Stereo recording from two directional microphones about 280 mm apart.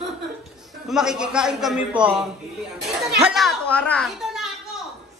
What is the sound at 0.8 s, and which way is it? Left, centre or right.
A woman's voice, centre.